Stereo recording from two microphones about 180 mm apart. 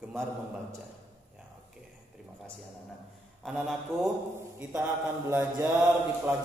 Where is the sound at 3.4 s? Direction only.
Centre (ahead or behind).